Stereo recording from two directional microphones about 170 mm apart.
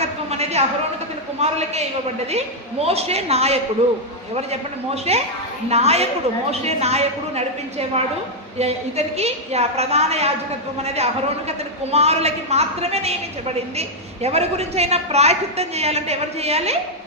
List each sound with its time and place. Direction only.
0.0 s a sound: 40° right (ahead or behind)
1.4 s a woman's voice: 40° right (ahead or behind)
5.1 s a woman's voice: 35° right (ahead or behind)